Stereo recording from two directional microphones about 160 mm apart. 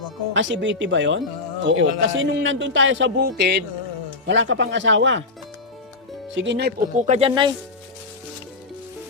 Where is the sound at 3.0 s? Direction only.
90° right.